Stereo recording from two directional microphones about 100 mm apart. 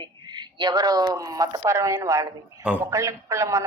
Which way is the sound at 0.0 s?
45° right (ahead or behind).